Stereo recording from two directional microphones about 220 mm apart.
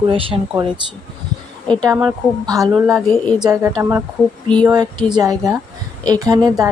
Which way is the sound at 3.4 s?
15° right (ahead or behind).